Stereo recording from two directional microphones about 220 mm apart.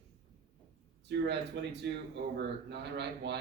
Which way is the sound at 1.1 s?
50° right (ahead or behind).